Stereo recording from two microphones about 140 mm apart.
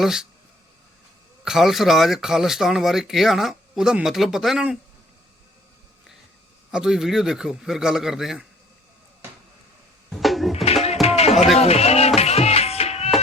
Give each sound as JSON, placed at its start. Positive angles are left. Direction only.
{"t": 0.0, "sound": "speech", "side_deg": -5}
{"t": 1.5, "sound": "speech", "side_deg": 0}
{"t": 6.7, "sound": "speech", "side_deg": -5}
{"t": 10.1, "sound": "music", "side_deg": 0}
{"t": 11.0, "sound": "music", "side_deg": 50}